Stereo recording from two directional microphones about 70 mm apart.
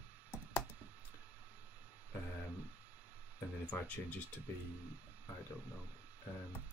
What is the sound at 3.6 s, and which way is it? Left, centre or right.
Speech, centre.